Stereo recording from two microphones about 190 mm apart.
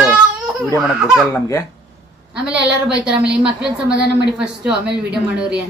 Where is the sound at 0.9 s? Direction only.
5° right (ahead or behind).